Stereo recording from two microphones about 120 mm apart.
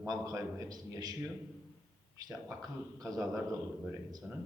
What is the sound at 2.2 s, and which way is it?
Speech, 30° right (ahead or behind).